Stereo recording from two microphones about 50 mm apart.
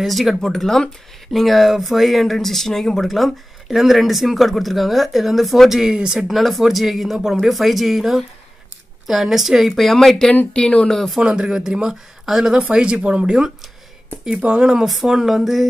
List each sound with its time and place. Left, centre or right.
0.0 s speech: centre
0.4 s speech: centre
5.9 s speech: centre
6.2 s speech: centre; by 10.9 s left
11.1 s speech: centre
15.0 s speech: centre